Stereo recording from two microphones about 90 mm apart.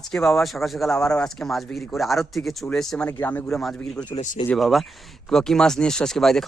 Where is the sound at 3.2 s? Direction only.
20° left (ahead or behind).